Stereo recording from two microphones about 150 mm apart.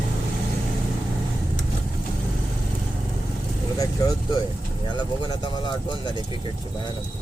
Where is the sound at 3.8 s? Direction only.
25° left (ahead or behind).